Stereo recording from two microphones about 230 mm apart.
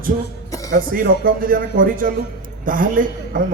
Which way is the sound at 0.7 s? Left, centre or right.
Right.